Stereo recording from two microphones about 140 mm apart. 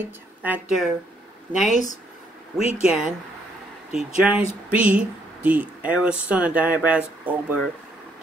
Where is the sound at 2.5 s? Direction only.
50° left (ahead or behind).